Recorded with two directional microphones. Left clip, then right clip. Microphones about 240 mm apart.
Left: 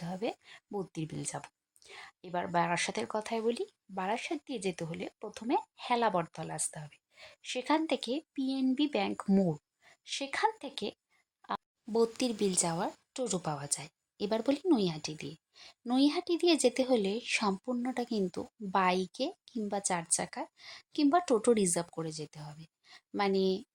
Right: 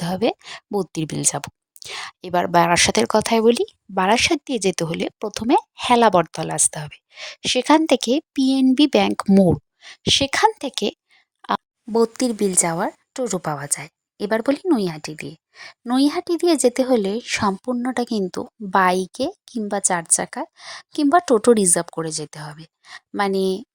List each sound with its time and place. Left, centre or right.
0.0 s a woman's voice: right